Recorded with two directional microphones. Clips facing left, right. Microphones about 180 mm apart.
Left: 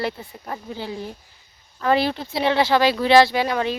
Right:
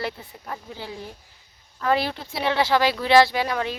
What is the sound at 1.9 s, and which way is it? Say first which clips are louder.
Speech: left 3 dB; 25° left (ahead or behind).